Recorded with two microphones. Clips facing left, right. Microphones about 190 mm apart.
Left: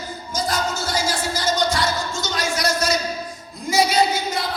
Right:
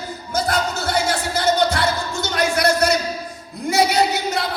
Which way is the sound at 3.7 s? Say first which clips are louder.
Right 1 dB; 65° right (ahead or behind).